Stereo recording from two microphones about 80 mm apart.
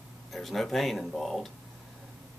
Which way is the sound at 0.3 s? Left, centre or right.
Centre.